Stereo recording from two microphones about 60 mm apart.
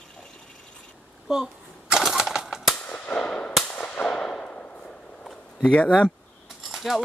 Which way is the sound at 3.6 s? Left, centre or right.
Left.